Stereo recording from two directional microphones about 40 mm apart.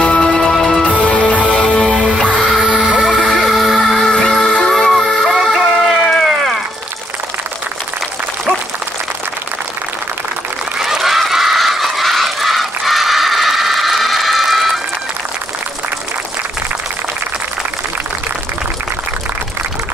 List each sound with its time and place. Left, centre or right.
0.0 s music: centre
0.9 s music: left
1.9 s music: centre
2.3 s music: centre
2.6 s vehicle: centre
3.0 s music: centre
4.1 s music: centre
5.2 s music: centre
6.0 s a sound: centre
10.8 s a sound: centre